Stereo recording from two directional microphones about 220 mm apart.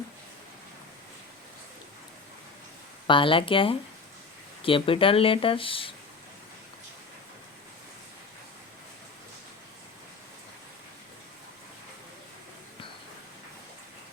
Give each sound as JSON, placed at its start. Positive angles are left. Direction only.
{"t": 3.1, "sound": "speech", "side_deg": 25}